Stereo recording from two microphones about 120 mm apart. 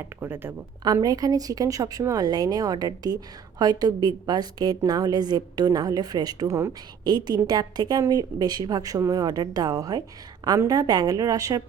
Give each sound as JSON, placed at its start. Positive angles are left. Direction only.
{"t": 0.2, "sound": "a woman's voice", "side_deg": -20}
{"t": 1.0, "sound": "a woman's voice", "side_deg": -30}